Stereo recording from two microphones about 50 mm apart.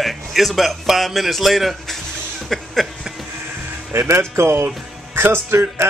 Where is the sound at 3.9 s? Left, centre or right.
Right.